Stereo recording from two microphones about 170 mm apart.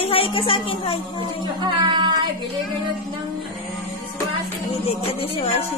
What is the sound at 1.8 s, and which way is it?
Child singing, 25° right (ahead or behind).